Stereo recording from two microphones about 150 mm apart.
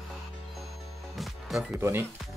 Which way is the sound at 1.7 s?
15° right (ahead or behind).